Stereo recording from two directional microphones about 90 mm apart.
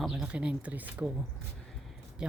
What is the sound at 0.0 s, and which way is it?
Speech, 5° right (ahead or behind).